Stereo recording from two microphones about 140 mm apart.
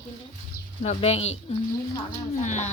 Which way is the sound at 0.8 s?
50° left (ahead or behind).